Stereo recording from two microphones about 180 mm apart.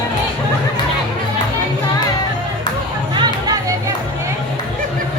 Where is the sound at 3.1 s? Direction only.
20° right (ahead or behind).